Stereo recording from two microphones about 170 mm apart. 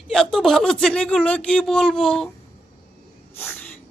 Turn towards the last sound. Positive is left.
turn(degrees=10)  # may be behind; listen again after turning